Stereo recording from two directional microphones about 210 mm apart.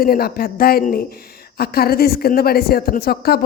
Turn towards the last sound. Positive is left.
turn(degrees=45)  # may be behind; listen again after turning